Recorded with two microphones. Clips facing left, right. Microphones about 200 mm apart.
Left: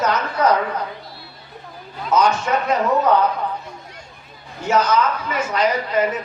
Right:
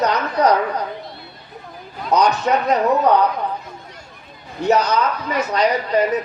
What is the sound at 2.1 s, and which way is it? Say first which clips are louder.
Speech: right 1 dB; 35° right (ahead or behind).